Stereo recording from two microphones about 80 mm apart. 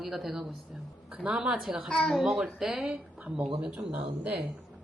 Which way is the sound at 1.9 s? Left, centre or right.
Centre.